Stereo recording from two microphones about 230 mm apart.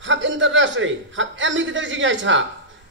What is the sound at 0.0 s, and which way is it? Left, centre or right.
A man's voice, right.